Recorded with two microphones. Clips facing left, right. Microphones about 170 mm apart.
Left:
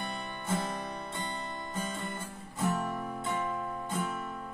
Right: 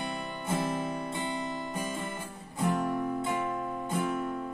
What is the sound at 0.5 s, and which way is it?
Music, 25° right (ahead or behind).